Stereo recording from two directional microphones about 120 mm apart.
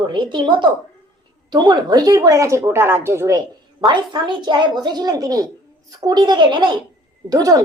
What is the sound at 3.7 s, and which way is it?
A woman's voice, 40° right (ahead or behind).